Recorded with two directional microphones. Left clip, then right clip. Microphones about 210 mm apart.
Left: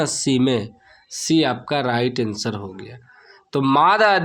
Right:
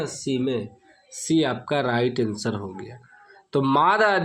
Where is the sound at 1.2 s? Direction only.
15° left (ahead or behind).